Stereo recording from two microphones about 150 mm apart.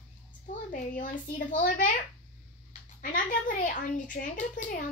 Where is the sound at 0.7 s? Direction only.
60° left (ahead or behind).